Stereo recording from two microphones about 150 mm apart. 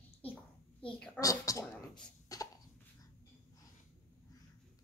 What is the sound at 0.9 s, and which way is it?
Speech, 5° left (ahead or behind).